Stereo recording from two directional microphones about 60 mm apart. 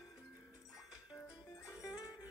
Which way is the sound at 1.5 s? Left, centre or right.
Left.